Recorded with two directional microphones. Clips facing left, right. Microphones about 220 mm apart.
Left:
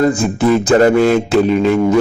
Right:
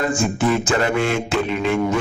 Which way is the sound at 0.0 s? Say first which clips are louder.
Left 6 dB; 35° left (ahead or behind).